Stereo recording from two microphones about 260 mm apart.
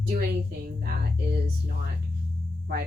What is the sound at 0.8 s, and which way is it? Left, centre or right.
A woman's voice, right.